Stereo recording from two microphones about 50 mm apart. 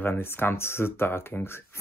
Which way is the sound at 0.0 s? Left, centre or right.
Left.